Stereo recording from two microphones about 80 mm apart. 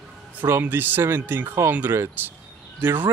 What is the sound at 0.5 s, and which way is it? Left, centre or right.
Speech, right.